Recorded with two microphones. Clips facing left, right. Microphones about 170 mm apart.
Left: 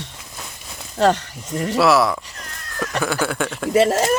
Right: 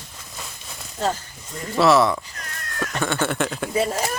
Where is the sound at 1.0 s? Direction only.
75° left (ahead or behind).